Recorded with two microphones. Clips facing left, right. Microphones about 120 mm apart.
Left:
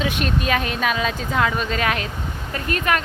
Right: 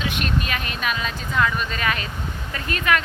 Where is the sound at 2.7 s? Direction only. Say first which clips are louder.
Even; 40° left (ahead or behind).